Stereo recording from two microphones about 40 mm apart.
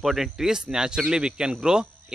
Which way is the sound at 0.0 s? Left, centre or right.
Centre.